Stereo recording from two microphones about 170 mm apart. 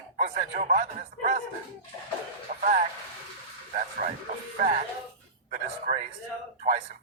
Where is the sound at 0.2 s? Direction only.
45° right (ahead or behind).